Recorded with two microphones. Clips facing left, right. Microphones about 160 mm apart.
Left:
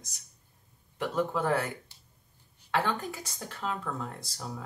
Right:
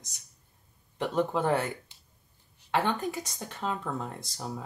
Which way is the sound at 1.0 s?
20° right (ahead or behind).